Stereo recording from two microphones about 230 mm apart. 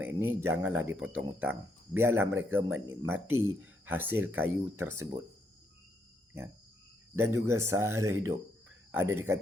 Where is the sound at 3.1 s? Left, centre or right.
Right.